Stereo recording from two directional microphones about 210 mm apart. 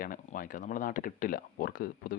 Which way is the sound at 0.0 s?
40° left (ahead or behind).